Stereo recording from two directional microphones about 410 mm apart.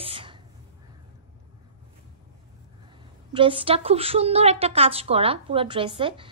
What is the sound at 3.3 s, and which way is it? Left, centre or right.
A woman's voice, centre.